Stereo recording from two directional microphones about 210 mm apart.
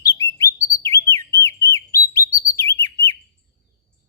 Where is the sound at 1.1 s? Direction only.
15° left (ahead or behind).